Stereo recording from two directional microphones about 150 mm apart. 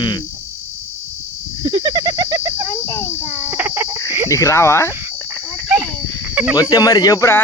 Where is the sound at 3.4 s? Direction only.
15° right (ahead or behind).